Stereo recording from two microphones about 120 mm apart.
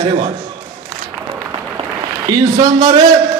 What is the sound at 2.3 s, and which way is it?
Speech, 30° right (ahead or behind).